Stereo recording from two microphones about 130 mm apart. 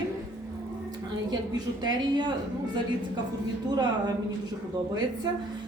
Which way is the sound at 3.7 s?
35° right (ahead or behind).